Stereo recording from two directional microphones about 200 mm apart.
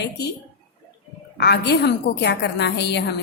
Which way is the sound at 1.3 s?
55° left (ahead or behind).